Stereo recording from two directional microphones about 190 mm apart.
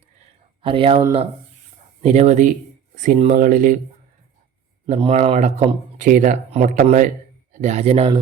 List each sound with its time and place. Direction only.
0.6 s speech: 30° right (ahead or behind); by 3.8 s 45° right (ahead or behind)
4.9 s speech: 30° right (ahead or behind)